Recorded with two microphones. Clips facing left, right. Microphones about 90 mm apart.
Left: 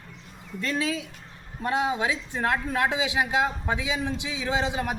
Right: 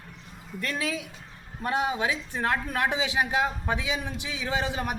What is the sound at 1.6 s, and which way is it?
Speech, 20° left (ahead or behind).